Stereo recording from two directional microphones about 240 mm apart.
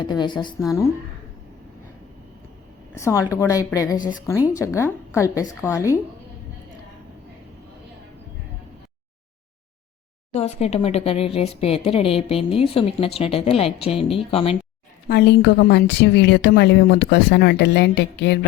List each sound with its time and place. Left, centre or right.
0.0 s a woman's voice: centre
2.9 s a woman's voice: centre
10.3 s a woman's voice: left
15.0 s a woman's voice: left